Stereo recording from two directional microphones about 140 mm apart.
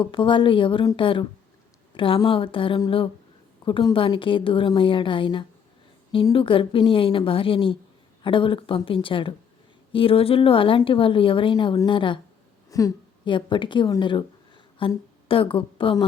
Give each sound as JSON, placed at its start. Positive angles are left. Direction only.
{"t": 0.0, "sound": "a woman's voice", "side_deg": 35}
{"t": 12.7, "sound": "a woman's voice", "side_deg": 25}
{"t": 13.2, "sound": "speech", "side_deg": 35}